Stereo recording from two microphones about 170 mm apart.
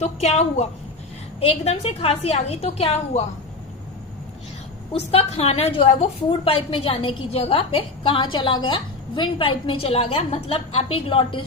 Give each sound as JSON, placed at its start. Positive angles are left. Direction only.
{"t": 0.0, "sound": "a woman's voice", "side_deg": 40}
{"t": 4.9, "sound": "a woman's voice", "side_deg": 35}